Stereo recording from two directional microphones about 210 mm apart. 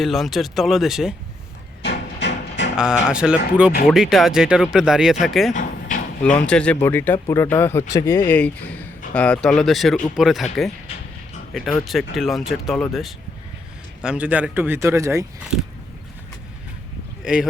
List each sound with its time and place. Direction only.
0.0 s speech: centre (ahead or behind)
1.8 s music: 55° left (ahead or behind)
2.7 s speech: 5° right (ahead or behind)
11.5 s speech: centre (ahead or behind)
17.2 s speech: 5° right (ahead or behind)